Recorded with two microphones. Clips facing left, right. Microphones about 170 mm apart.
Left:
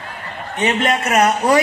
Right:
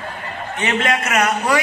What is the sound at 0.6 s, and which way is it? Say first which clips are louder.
A man's voice: left 3 dB; 35° left (ahead or behind).